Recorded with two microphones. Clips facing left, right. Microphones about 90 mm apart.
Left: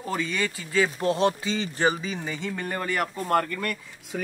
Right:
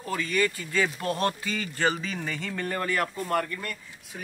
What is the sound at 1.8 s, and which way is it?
Speech, 10° left (ahead or behind).